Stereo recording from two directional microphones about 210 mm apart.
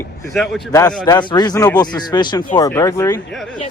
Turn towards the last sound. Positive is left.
turn(degrees=15)  # may be behind; listen again after turning